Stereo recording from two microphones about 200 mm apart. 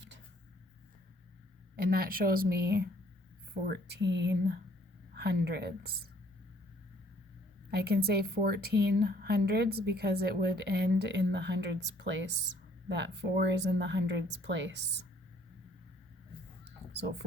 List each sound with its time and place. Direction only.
1.7 s a woman's voice: 50° right (ahead or behind)
7.9 s a woman's voice: 50° right (ahead or behind)
16.6 s a sound: 55° right (ahead or behind)